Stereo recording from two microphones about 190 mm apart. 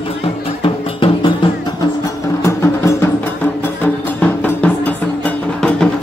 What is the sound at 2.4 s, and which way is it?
Music, 15° left (ahead or behind).